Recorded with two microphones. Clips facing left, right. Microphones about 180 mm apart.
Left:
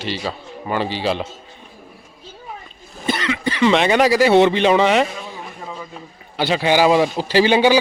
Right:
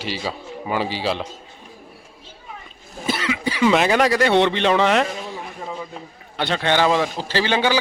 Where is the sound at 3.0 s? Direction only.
5° right (ahead or behind).